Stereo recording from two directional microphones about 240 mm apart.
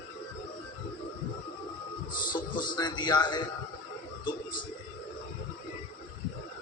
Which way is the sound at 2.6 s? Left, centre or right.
Centre.